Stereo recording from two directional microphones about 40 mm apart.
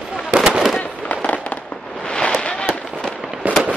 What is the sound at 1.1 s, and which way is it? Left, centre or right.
Fireworks, left.